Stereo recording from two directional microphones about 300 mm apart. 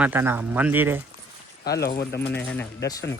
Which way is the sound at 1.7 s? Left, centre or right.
Left.